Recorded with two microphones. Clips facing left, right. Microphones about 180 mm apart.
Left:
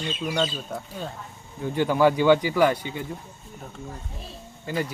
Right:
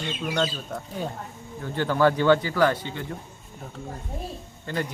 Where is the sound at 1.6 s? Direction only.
15° left (ahead or behind).